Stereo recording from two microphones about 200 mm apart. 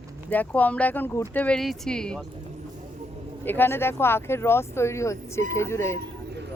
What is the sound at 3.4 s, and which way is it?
Speech, 10° left (ahead or behind).